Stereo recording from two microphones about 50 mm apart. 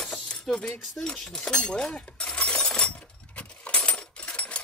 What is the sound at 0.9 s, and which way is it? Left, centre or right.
Speech, centre.